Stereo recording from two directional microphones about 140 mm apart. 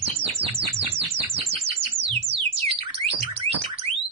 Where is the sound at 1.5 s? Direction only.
45° right (ahead or behind).